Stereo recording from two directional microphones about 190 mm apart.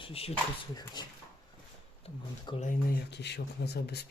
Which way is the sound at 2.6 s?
45° left (ahead or behind).